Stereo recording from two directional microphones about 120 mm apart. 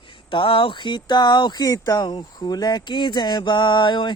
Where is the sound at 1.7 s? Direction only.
30° left (ahead or behind).